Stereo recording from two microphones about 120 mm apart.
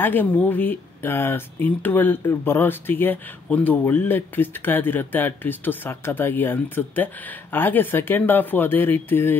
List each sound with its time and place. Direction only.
0.0 s speech: 15° left (ahead or behind)